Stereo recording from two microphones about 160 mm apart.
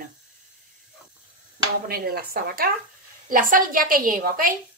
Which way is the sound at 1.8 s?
70° right (ahead or behind).